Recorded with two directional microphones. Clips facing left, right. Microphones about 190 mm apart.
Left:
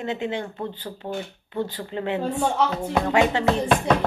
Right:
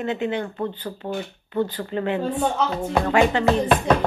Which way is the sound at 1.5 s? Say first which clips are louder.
Right 4 dB; 25° left (ahead or behind).